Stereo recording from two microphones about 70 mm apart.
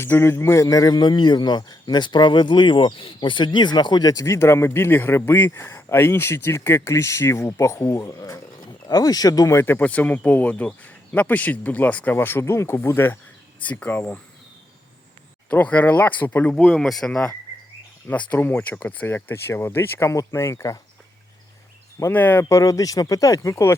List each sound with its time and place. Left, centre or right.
0.0 s speech: left
8.6 s speech: left
9.6 s speech: left
12.2 s speech: left
13.6 s speech: left
15.4 s speech: left
16.6 s speech: centre; by 20.1 s left
20.1 s speech: left
22.1 s speech: left
22.4 s speech: left